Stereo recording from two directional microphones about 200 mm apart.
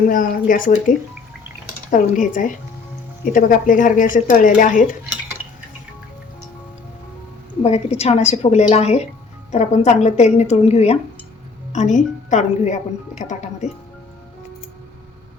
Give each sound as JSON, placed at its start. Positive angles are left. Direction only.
{"t": 0.1, "sound": "a woman's voice", "side_deg": 45}
{"t": 7.6, "sound": "a woman's voice", "side_deg": 30}